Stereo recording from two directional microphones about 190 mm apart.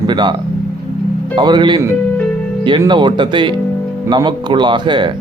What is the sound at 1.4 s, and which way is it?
Speech, 25° right (ahead or behind).